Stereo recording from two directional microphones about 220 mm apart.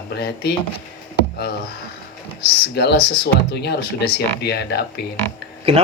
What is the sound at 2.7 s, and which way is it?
Speech, 50° left (ahead or behind).